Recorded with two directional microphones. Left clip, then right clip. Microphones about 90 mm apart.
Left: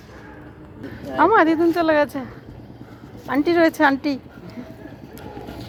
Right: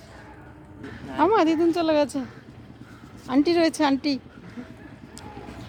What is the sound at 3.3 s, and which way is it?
Speech, 35° right (ahead or behind).